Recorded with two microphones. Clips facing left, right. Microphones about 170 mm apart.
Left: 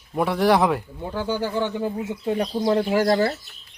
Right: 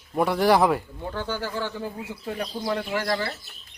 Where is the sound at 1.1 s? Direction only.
15° left (ahead or behind); by 3.2 s 30° left (ahead or behind).